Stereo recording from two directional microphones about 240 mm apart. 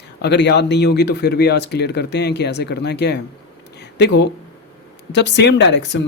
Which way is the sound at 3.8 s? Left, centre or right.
Left.